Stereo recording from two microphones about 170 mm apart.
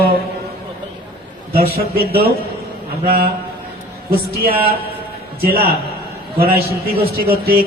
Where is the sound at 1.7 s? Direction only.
65° right (ahead or behind).